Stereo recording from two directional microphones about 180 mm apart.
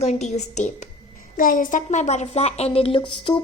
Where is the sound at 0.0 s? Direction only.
40° left (ahead or behind).